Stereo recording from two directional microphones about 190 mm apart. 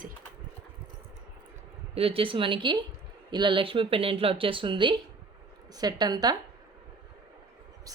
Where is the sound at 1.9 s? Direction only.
30° right (ahead or behind).